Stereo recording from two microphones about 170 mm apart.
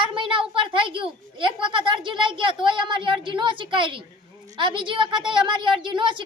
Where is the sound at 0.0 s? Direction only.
30° right (ahead or behind).